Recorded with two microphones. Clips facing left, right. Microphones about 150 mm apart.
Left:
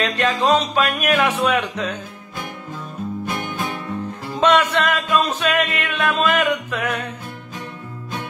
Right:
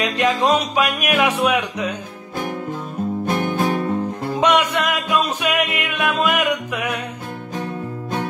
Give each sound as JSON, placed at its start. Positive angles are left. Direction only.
{"t": 0.0, "sound": "music", "side_deg": -15}
{"t": 3.4, "sound": "music", "side_deg": -45}
{"t": 4.4, "sound": "music", "side_deg": -15}